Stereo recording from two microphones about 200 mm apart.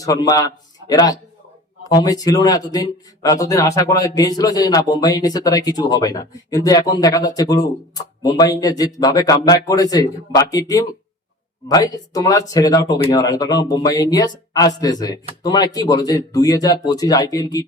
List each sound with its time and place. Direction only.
0.0 s a man's voice: 15° left (ahead or behind)